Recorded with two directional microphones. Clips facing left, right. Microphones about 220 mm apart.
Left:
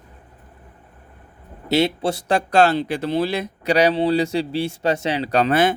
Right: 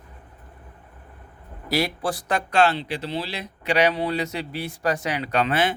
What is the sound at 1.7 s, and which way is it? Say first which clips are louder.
Speech: left 5 dB; 25° left (ahead or behind).